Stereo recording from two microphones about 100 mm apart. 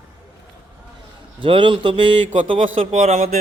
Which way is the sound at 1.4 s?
60° right (ahead or behind).